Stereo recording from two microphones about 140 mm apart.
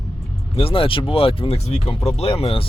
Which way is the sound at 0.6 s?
40° left (ahead or behind).